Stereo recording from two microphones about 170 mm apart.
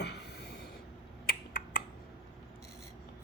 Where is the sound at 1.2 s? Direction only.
60° left (ahead or behind).